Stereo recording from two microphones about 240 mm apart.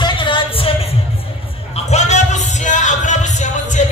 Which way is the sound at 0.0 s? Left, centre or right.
Left.